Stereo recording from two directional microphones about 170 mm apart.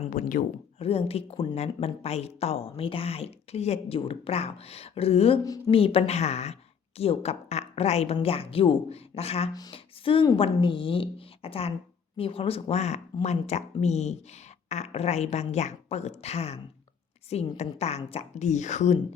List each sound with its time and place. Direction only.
0.0 s speech: 50° left (ahead or behind)
0.8 s speech: 35° left (ahead or behind)
9.5 s speech: 25° left (ahead or behind); by 18.9 s 45° left (ahead or behind)